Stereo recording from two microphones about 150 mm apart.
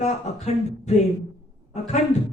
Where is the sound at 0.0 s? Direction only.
50° left (ahead or behind).